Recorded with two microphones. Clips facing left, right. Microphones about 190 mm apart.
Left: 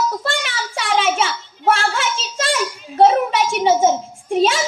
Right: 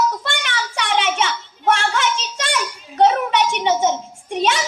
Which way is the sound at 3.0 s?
40° left (ahead or behind).